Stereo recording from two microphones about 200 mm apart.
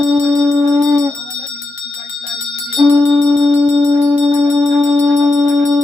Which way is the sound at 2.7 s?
30° right (ahead or behind).